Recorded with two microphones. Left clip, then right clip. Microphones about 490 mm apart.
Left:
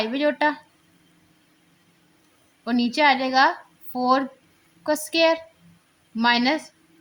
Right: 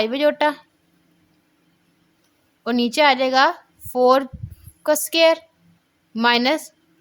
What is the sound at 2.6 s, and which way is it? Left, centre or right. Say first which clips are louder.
A woman's voice: right 3 dB; right.